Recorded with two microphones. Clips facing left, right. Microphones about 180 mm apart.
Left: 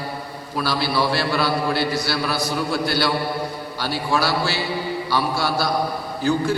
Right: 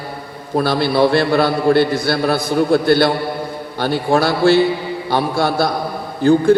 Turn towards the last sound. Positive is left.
turn(degrees=-55)  # may be behind; listen again after turning